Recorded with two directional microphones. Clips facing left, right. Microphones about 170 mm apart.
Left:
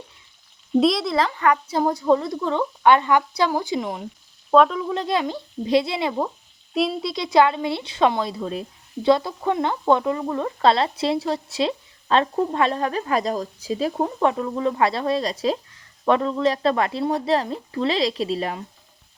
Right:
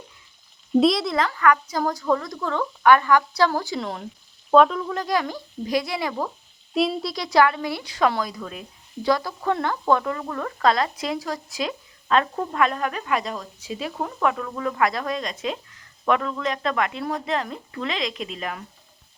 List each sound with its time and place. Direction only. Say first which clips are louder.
0.7 s speech: even; centre (ahead or behind)
1.1 s a woman's voice: even; 30° left (ahead or behind)
4.5 s speech: even; centre (ahead or behind)
4.9 s a woman's voice: left 2 dB; 25° left (ahead or behind)
6.7 s speech: even; centre (ahead or behind)
7.1 s a woman's voice: left 4 dB; 25° left (ahead or behind)